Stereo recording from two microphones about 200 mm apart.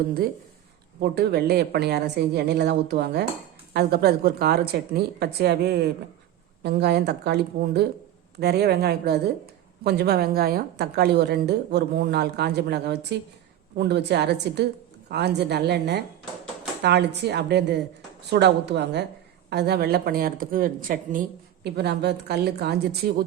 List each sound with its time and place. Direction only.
0.9 s a woman's voice: 55° right (ahead or behind)